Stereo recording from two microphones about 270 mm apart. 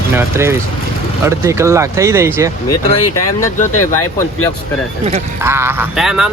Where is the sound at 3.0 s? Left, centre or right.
Left.